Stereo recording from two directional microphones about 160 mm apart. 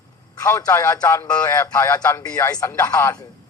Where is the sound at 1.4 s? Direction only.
20° left (ahead or behind).